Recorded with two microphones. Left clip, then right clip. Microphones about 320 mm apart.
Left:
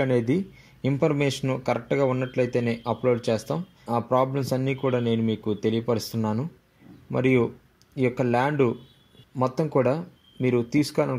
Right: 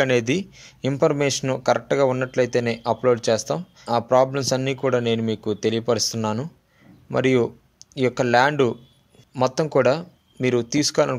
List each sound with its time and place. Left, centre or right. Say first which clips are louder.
0.0 s speech: right 4 dB; right